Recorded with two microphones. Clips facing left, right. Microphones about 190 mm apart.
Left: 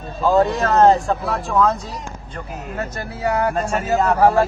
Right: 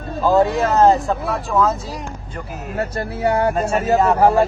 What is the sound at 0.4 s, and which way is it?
Speech, 5° right (ahead or behind).